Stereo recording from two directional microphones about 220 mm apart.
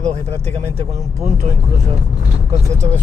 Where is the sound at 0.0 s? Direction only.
30° right (ahead or behind).